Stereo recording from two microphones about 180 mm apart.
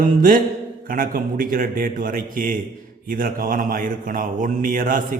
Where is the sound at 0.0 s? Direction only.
50° right (ahead or behind).